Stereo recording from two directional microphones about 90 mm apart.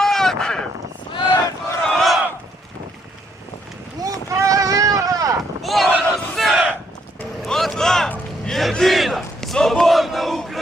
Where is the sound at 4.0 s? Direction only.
40° right (ahead or behind).